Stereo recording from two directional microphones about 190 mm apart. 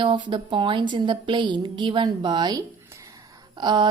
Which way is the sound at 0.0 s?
25° right (ahead or behind).